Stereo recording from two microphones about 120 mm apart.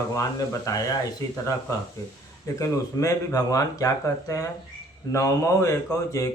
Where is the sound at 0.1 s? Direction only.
30° left (ahead or behind).